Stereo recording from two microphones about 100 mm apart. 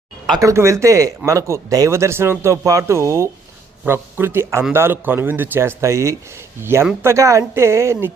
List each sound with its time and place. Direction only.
0.3 s speech: 35° right (ahead or behind)